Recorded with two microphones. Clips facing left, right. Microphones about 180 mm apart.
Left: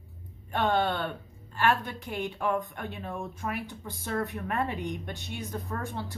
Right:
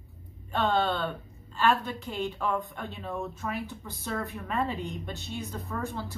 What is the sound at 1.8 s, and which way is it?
Speech, 15° left (ahead or behind).